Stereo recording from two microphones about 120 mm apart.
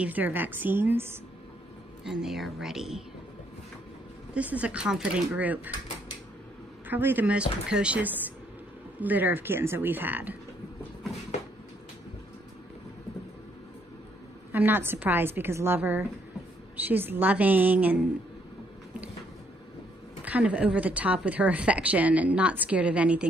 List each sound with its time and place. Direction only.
0.0 s a woman's voice: 15° right (ahead or behind)
2.0 s speech: 5° right (ahead or behind)
4.3 s a woman's voice: 10° right (ahead or behind)
6.9 s a woman's voice: 15° right (ahead or behind)
14.5 s a woman's voice: 15° right (ahead or behind)
20.2 s a woman's voice: 10° right (ahead or behind)